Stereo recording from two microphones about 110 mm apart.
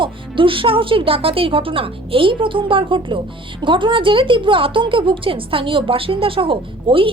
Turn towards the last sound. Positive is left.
turn(degrees=-50)  # may be behind; listen again after turning